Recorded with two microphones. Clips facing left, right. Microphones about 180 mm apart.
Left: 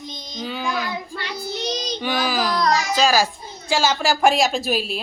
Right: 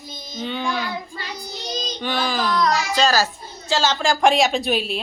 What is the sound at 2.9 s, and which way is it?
A woman's voice, 10° left (ahead or behind).